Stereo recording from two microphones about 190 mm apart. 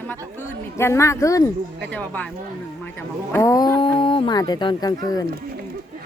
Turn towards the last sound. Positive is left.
turn(degrees=20)  # may be behind; listen again after turning